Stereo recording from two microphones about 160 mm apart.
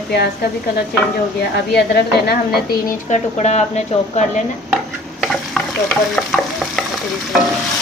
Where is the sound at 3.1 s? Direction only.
45° left (ahead or behind).